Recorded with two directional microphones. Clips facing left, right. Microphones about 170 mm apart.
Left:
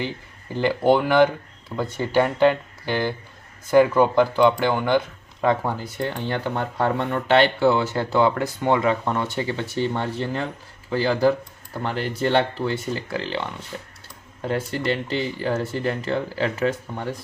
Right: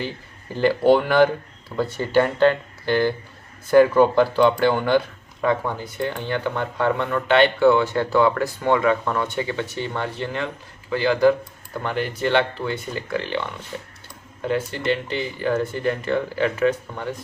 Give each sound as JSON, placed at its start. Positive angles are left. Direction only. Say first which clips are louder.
{"t": 0.5, "sound": "speech", "louder": "right 2 dB", "side_deg": 15}
{"t": 6.0, "sound": "speech", "louder": "right 2 dB", "side_deg": 35}
{"t": 14.4, "sound": "speech", "louder": "right 1 dB", "side_deg": 35}